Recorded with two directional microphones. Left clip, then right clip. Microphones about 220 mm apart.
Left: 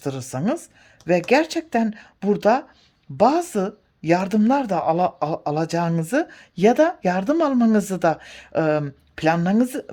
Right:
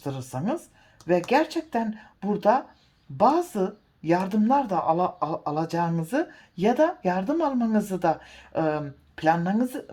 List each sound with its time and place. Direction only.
0.0 s speech: 45° left (ahead or behind)